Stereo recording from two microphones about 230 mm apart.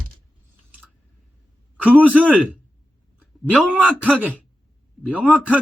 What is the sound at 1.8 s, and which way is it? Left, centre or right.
A man's voice, centre.